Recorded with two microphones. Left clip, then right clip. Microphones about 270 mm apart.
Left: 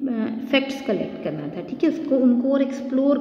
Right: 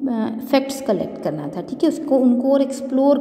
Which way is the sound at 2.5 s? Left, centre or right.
Centre.